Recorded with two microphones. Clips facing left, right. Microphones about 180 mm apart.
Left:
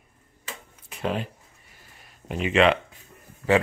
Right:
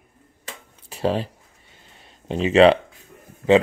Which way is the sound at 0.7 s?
30° right (ahead or behind).